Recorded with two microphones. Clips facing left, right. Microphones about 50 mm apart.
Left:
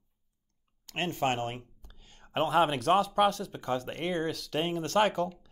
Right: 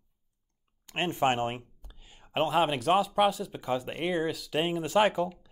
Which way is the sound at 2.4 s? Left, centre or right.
Centre.